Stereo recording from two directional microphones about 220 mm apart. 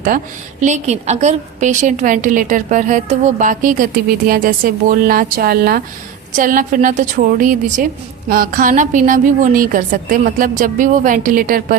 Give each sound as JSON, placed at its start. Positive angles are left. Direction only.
{"t": 0.6, "sound": "a woman's voice", "side_deg": -30}